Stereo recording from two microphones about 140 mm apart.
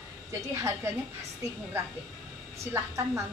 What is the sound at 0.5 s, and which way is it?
Speech, 20° right (ahead or behind).